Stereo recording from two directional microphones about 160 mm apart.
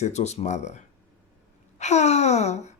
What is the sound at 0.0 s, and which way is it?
Speech, 45° left (ahead or behind).